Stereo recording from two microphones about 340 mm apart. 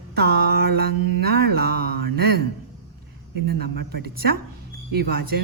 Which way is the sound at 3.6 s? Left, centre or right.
Right.